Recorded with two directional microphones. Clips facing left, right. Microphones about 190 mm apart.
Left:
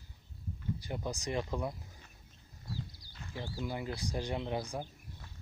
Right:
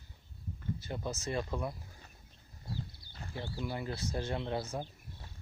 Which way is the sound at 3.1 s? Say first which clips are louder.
Right 1 dB; 35° right (ahead or behind).